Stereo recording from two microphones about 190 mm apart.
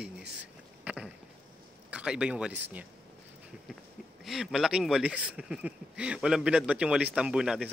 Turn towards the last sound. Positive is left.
turn(degrees=-5)  # may be behind; listen again after turning